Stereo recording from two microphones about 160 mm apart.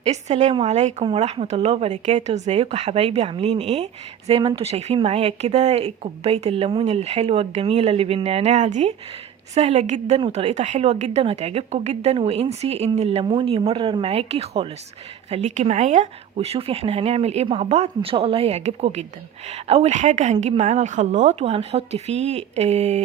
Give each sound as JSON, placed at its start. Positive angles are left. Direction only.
{"t": 0.0, "sound": "a woman's voice", "side_deg": -45}